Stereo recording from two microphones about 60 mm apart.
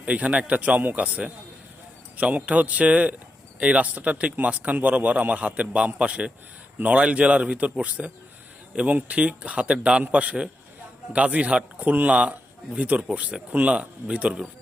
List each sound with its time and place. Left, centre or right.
0.0 s speech: right